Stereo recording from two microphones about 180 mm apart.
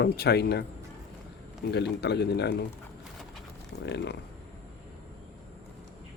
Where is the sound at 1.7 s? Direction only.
70° left (ahead or behind).